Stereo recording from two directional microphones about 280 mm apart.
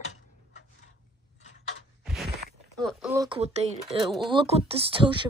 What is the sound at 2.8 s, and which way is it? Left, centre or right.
Speech, centre.